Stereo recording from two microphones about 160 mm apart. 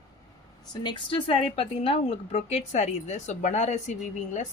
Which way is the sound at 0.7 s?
30° left (ahead or behind).